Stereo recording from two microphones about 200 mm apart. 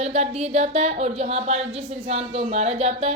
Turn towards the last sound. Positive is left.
turn(degrees=-30)  # may be behind; listen again after turning